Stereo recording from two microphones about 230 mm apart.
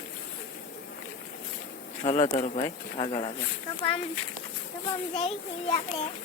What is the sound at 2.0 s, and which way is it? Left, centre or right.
Speech, left.